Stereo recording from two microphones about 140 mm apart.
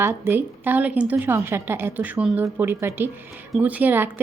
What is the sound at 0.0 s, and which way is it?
Speech, 15° right (ahead or behind).